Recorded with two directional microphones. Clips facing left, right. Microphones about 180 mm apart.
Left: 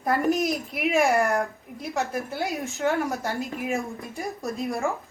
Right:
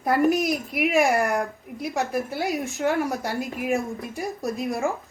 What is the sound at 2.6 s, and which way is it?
A woman's voice, 10° right (ahead or behind).